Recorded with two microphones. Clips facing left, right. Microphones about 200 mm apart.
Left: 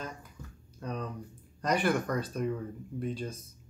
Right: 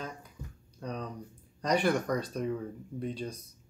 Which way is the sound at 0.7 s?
5° left (ahead or behind).